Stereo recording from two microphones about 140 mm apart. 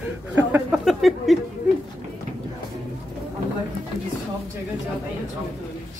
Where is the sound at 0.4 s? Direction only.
15° right (ahead or behind).